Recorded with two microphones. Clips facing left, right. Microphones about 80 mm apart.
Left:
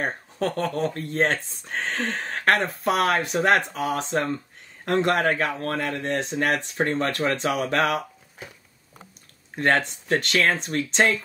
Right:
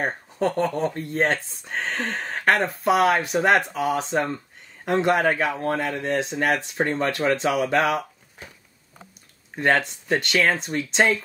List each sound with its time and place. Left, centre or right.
0.0 s speech: centre
9.6 s speech: centre